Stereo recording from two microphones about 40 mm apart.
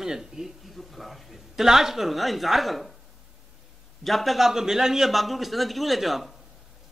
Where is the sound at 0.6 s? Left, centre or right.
Centre.